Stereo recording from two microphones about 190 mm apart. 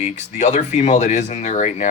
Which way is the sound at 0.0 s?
40° left (ahead or behind).